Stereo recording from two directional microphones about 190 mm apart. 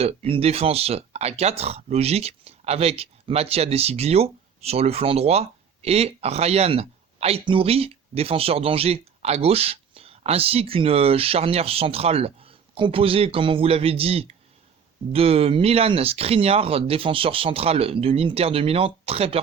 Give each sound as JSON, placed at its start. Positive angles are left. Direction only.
{"t": 0.0, "sound": "speech", "side_deg": -30}